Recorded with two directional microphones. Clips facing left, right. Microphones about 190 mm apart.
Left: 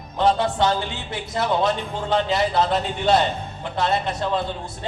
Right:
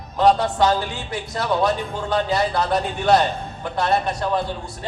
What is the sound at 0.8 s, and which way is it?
A man's voice, 20° left (ahead or behind).